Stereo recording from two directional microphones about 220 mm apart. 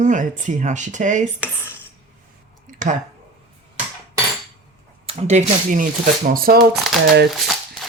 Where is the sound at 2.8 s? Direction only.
35° right (ahead or behind).